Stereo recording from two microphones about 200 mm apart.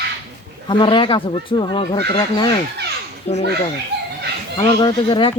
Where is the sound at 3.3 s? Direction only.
35° left (ahead or behind).